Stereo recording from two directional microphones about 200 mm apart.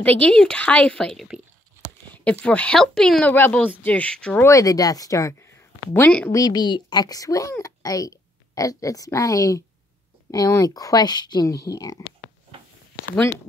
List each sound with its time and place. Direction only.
0.0 s a woman's voice: 5° left (ahead or behind)
2.4 s a woman's voice: 5° left (ahead or behind)